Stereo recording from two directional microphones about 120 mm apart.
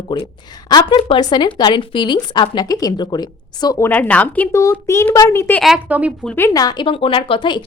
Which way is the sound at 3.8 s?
15° left (ahead or behind).